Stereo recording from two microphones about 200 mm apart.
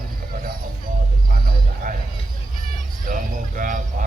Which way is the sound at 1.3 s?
45° right (ahead or behind).